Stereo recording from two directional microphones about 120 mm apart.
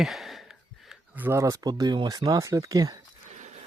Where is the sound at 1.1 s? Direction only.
15° right (ahead or behind).